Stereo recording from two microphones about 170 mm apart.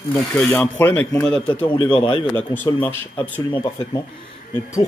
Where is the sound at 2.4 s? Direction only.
10° left (ahead or behind).